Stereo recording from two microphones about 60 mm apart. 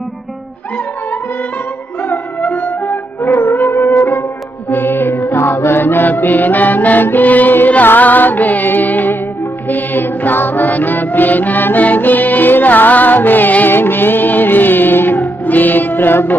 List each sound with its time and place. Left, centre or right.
2.0 s music: left